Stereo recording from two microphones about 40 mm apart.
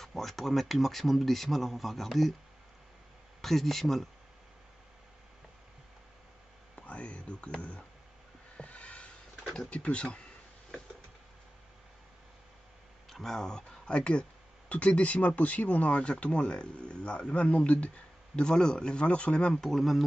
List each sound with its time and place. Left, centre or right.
0.0 s speech: centre
3.3 s speech: centre
6.7 s a sound: left
9.7 s speech: left
13.1 s speech: centre
13.8 s speech: left
19.5 s speech: centre